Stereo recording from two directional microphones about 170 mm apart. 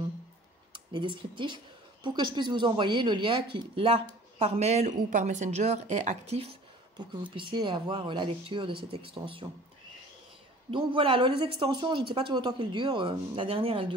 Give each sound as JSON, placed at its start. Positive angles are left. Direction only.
{"t": 0.9, "sound": "speech", "side_deg": -30}
{"t": 10.7, "sound": "speech", "side_deg": -30}